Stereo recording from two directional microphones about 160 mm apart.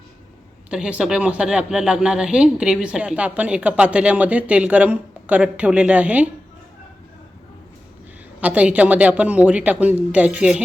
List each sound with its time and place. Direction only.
0.7 s speech: 5° right (ahead or behind)
8.4 s speech: 10° right (ahead or behind)